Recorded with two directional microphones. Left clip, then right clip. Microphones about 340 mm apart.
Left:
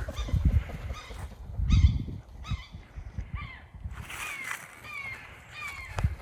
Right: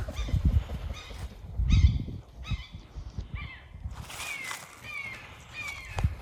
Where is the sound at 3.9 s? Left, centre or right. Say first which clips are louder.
Even; centre.